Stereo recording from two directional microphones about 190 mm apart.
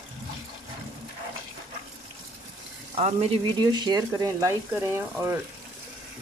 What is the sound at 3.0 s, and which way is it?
Speech, 30° right (ahead or behind).